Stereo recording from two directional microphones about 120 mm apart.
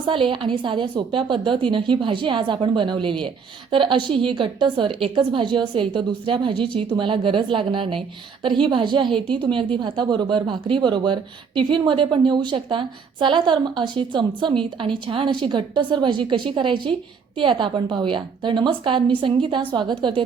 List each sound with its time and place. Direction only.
0.0 s a woman's voice: 45° right (ahead or behind)